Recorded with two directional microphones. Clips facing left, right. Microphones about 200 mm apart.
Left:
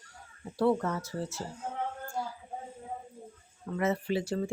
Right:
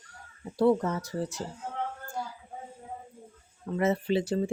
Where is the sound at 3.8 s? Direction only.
25° right (ahead or behind).